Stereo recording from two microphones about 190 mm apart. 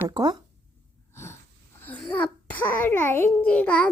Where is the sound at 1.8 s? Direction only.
5° left (ahead or behind).